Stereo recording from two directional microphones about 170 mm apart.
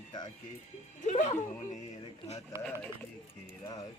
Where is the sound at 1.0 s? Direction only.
40° left (ahead or behind).